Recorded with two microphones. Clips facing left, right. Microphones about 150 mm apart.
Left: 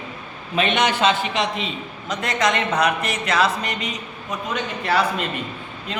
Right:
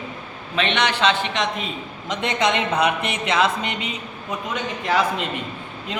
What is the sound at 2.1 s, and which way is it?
Speech, 25° right (ahead or behind).